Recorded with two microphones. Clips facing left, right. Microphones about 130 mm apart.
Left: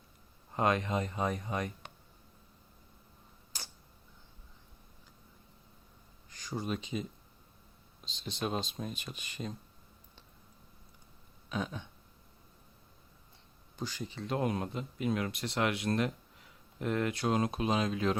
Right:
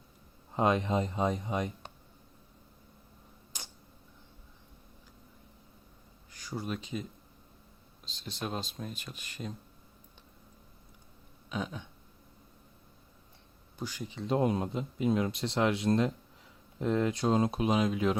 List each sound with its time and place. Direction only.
0.5 s speech: 20° right (ahead or behind)
3.5 s tick-tock: 20° right (ahead or behind)
6.6 s speech: centre (ahead or behind)
8.0 s speech: centre (ahead or behind)
11.4 s a sound: 5° right (ahead or behind)
13.7 s speech: 10° right (ahead or behind)